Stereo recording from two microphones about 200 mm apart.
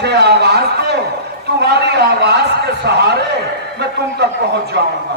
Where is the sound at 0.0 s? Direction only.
55° right (ahead or behind).